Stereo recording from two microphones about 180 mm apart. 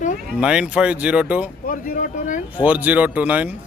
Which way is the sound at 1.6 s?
50° left (ahead or behind).